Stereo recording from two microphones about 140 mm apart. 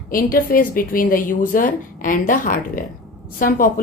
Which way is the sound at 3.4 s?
85° left.